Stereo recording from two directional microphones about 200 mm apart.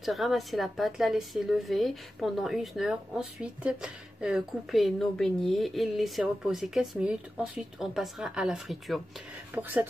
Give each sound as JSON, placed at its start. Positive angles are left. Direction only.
{"t": 0.0, "sound": "a woman's voice", "side_deg": 0}